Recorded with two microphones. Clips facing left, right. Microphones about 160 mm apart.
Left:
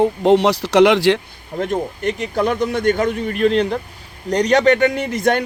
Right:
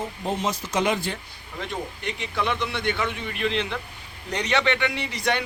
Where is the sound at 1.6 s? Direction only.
45° left (ahead or behind).